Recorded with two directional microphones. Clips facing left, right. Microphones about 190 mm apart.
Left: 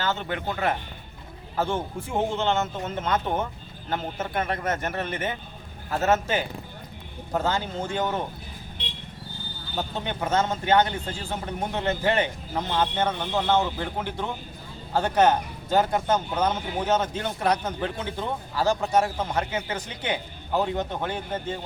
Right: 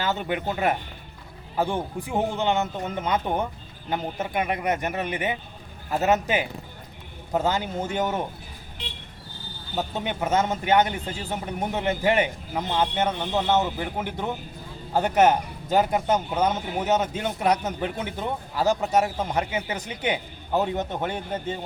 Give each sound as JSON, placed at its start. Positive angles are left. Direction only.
{"t": 0.0, "sound": "a man's voice", "side_deg": -15}
{"t": 9.9, "sound": "a man's voice", "side_deg": -15}